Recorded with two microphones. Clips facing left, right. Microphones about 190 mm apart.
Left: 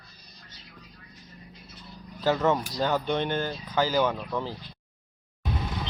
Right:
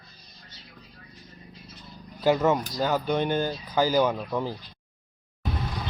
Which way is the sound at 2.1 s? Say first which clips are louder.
Right 2 dB; 10° right (ahead or behind).